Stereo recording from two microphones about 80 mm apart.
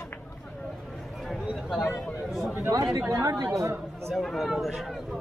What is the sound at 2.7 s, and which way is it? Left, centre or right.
Speech, right.